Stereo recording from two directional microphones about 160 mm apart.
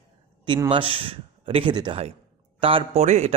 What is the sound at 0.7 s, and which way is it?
A man's voice, 35° right (ahead or behind).